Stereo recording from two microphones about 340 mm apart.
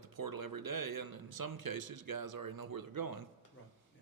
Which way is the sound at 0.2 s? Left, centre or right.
Right.